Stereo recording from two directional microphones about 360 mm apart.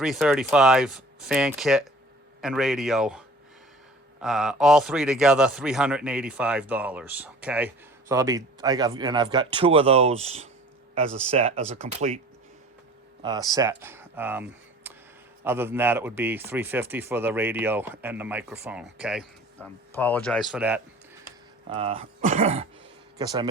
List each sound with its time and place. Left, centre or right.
0.0 s a man's voice: centre
13.2 s a man's voice: centre
21.7 s speech: centre